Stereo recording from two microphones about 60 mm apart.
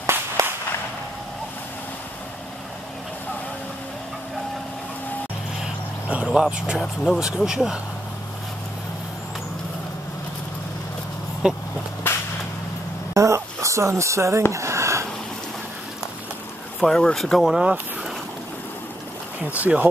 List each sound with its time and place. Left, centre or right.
0.4 s a sound: right
6.2 s speech: centre
7.2 s speech: centre
11.4 s speech: centre
12.1 s whip: left
13.1 s a sound: right
16.8 s speech: centre
17.4 s speech: centre
19.7 s speech: centre